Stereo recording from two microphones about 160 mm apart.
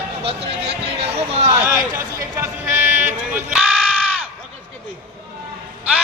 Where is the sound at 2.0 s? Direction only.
15° right (ahead or behind).